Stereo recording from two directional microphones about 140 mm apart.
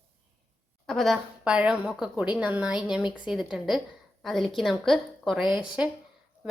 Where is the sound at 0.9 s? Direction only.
Centre (ahead or behind).